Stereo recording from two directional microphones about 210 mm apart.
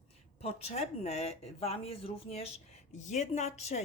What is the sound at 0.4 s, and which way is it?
A woman's voice, 30° left (ahead or behind).